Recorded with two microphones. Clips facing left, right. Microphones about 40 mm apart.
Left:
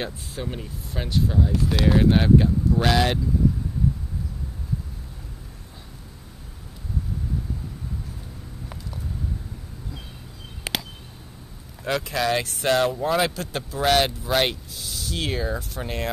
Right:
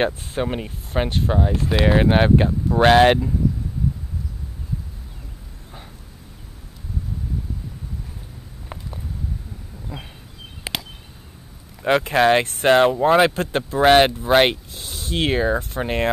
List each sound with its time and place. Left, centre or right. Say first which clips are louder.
0.0 s speech: right 9 dB; right
11.8 s speech: right 8 dB; right